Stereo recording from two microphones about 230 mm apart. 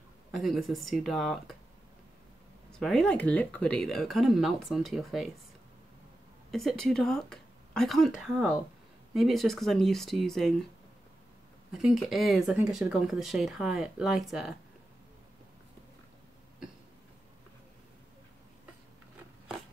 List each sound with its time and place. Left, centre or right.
0.3 s speech: centre
2.7 s speech: centre
6.5 s speech: centre
11.8 s speech: centre